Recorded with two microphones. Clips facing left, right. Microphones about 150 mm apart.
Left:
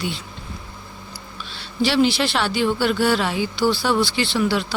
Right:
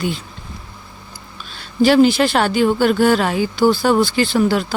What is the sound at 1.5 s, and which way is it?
Speech, 45° right (ahead or behind).